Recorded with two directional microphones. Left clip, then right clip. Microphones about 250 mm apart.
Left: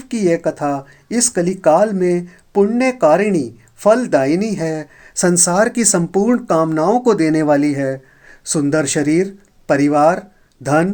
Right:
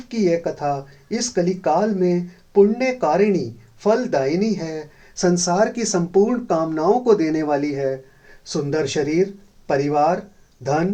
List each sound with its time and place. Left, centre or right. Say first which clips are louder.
0.1 s speech: left 4 dB; left